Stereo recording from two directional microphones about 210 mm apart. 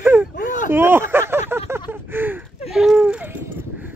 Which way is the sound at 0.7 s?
10° right (ahead or behind).